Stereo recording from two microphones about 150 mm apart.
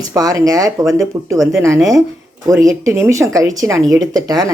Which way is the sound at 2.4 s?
20° right (ahead or behind).